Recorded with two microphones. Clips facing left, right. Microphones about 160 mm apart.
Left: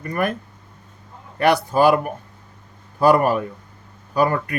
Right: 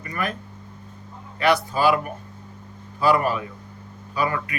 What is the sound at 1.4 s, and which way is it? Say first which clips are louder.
Speech: left 4 dB; 50° left (ahead or behind).